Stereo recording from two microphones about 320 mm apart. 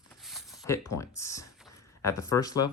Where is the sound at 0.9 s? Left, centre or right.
Centre.